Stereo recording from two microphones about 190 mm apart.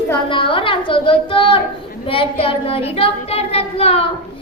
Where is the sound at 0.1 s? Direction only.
25° left (ahead or behind).